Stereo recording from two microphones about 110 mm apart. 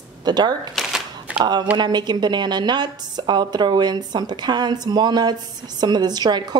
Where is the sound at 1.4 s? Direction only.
40° right (ahead or behind).